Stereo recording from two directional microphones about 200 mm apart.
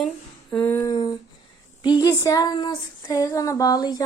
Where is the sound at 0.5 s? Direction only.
10° left (ahead or behind).